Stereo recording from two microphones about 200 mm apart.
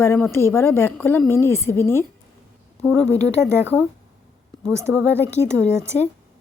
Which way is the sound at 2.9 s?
10° right (ahead or behind).